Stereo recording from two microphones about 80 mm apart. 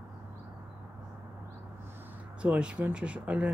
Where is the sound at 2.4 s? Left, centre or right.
Centre.